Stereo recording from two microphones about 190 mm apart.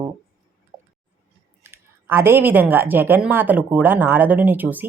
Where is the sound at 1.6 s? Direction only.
10° right (ahead or behind).